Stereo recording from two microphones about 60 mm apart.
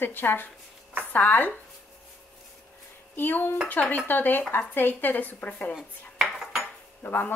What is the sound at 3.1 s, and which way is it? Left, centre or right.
A woman's voice, left.